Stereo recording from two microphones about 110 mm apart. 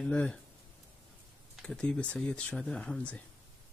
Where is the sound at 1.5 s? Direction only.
5° left (ahead or behind).